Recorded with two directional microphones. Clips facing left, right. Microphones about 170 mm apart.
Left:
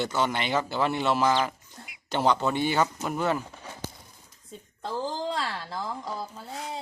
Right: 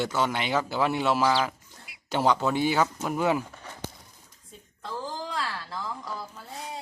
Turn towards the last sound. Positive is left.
turn(degrees=25)  # may be behind; listen again after turning